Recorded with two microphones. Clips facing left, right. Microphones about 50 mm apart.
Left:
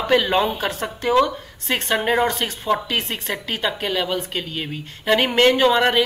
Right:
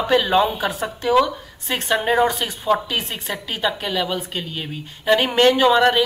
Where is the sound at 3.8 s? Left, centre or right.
Centre.